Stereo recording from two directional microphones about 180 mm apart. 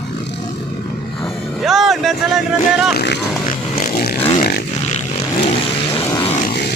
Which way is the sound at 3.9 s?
60° left (ahead or behind).